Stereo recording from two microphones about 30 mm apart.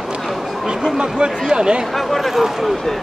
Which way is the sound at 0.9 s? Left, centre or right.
Right.